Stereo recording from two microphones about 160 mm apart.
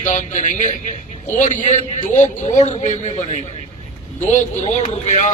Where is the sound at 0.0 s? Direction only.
50° left (ahead or behind).